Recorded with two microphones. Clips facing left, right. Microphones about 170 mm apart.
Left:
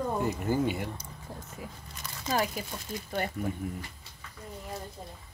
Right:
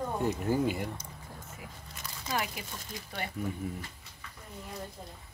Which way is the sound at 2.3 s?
35° left (ahead or behind).